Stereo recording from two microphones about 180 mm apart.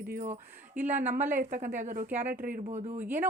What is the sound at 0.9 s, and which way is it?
Speech, 45° right (ahead or behind).